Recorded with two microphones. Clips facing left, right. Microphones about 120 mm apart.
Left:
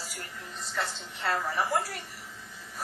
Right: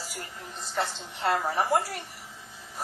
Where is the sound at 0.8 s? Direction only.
30° right (ahead or behind).